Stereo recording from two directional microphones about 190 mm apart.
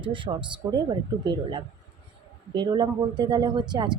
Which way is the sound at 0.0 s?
25° right (ahead or behind).